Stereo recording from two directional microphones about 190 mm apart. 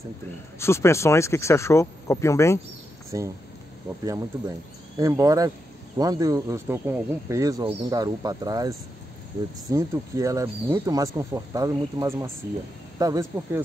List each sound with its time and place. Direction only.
0.6 s speech: 15° left (ahead or behind)
3.1 s speech: 20° right (ahead or behind)